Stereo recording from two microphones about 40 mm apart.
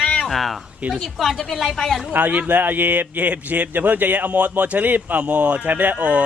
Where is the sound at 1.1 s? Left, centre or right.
Centre.